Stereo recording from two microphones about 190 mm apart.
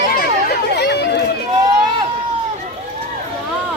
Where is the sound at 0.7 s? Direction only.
60° left (ahead or behind).